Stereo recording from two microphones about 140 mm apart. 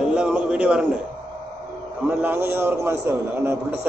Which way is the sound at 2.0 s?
15° right (ahead or behind).